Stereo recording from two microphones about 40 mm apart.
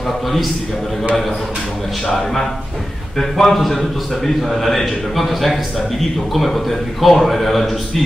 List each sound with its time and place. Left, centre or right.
2.0 s a man's voice: centre